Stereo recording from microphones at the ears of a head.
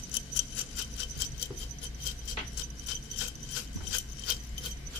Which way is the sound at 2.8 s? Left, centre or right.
Left.